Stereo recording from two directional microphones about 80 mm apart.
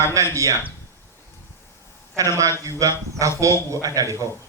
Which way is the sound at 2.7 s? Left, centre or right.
Right.